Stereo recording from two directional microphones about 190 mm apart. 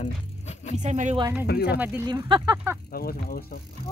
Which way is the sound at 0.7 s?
40° right (ahead or behind).